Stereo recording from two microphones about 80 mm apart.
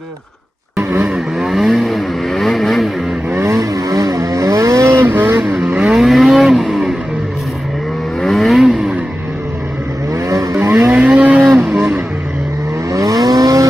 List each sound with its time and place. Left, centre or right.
1.0 s vehicle: centre
3.3 s vehicle: right
5.6 s vehicle: centre
8.2 s vehicle: centre
10.3 s vehicle: right
11.1 s vehicle: centre
11.7 s vehicle: right
12.9 s vehicle: right